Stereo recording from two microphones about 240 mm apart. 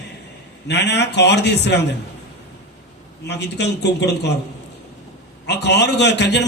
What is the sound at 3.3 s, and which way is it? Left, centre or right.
A man's voice, left.